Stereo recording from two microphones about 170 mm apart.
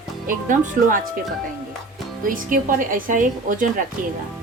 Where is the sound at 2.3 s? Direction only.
50° right (ahead or behind).